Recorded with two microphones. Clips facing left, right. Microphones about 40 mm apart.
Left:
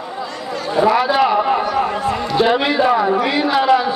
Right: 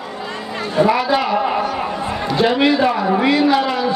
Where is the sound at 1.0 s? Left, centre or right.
Centre.